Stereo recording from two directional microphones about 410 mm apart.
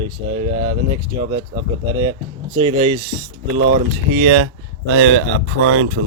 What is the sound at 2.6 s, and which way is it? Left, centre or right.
Speech, centre.